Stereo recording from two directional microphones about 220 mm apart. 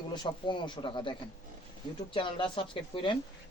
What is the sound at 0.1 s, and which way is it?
Speech, 20° left (ahead or behind).